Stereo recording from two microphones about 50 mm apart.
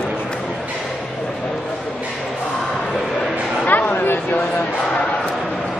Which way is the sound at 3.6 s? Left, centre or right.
Left.